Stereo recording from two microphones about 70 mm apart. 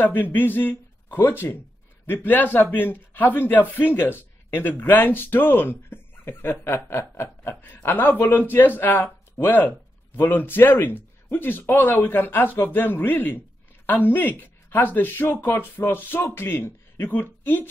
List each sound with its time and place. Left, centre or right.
0.0 s a man's voice: left